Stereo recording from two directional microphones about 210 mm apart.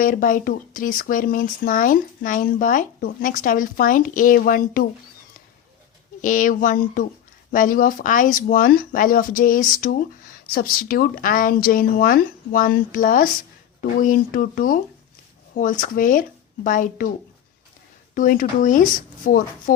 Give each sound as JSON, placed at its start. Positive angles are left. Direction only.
{"t": 0.0, "sound": "speech", "side_deg": 40}
{"t": 6.2, "sound": "speech", "side_deg": 40}
{"t": 18.1, "sound": "speech", "side_deg": 40}